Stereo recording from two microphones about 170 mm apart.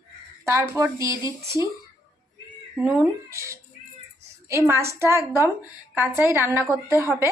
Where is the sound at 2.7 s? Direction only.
5° right (ahead or behind).